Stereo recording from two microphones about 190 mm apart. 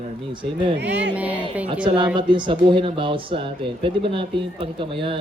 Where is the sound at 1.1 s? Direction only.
5° right (ahead or behind).